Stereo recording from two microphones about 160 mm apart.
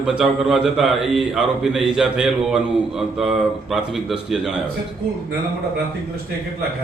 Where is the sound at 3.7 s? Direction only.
Centre (ahead or behind).